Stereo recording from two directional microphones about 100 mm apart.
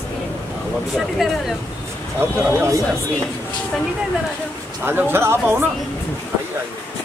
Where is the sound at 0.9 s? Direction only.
5° right (ahead or behind).